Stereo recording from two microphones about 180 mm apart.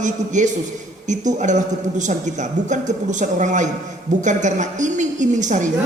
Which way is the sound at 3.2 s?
45° right (ahead or behind).